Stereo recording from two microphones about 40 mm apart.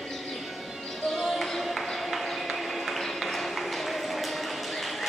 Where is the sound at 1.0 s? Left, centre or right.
Centre.